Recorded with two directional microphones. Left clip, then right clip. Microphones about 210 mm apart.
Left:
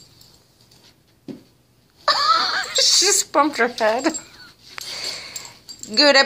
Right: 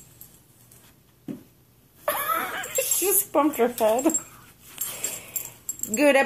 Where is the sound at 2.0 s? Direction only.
5° left (ahead or behind).